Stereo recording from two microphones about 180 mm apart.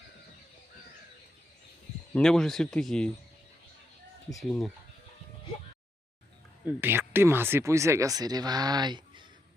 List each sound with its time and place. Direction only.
2.1 s speech: 5° left (ahead or behind)
4.4 s speech: 5° left (ahead or behind)
6.7 s speech: 10° right (ahead or behind)